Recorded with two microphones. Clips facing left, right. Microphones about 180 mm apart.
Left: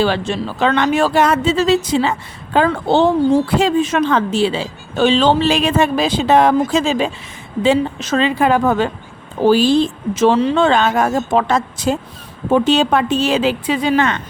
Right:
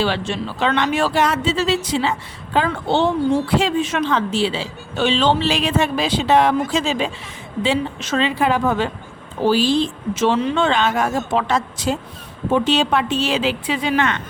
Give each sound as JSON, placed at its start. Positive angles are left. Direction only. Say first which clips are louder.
{"t": 0.0, "sound": "speech", "louder": "left 4 dB", "side_deg": 40}